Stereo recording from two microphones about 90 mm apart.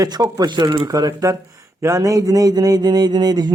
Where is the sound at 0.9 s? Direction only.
45° right (ahead or behind).